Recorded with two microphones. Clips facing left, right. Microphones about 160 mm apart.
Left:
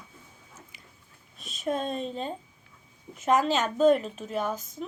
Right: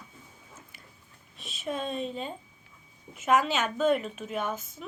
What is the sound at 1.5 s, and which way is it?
Speech, 40° left (ahead or behind).